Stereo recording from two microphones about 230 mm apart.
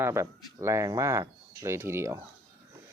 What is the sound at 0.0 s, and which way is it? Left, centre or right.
Speech, centre.